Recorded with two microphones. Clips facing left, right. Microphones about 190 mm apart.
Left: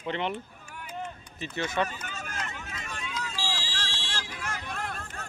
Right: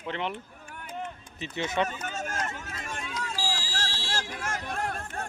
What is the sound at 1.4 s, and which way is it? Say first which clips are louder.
Speech: right 1 dB; 20° right (ahead or behind).